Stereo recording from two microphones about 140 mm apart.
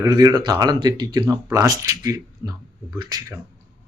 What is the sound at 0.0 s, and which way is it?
Speech, 25° right (ahead or behind).